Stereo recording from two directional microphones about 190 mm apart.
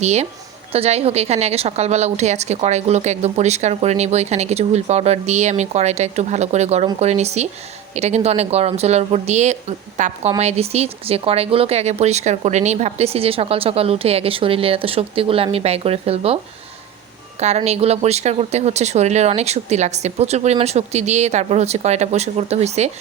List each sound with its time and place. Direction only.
0.0 s a woman's voice: 35° right (ahead or behind)
17.4 s a woman's voice: 35° right (ahead or behind)